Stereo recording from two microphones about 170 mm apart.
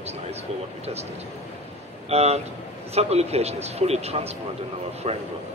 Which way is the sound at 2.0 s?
40° right (ahead or behind).